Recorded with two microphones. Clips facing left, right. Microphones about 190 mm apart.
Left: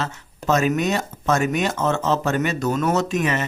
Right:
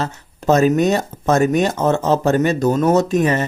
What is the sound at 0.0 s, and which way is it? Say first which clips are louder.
Speech: right 5 dB; 35° right (ahead or behind).